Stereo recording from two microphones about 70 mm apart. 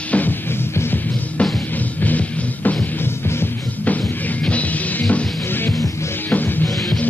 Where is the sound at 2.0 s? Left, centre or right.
Left.